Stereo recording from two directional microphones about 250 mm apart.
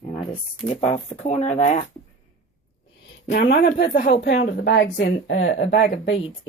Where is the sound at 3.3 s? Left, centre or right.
Left.